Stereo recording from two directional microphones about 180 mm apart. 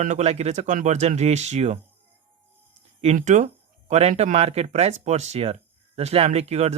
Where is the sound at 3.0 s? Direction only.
40° right (ahead or behind).